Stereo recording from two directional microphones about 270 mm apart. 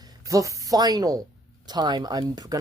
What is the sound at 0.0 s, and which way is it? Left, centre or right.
Speech, centre.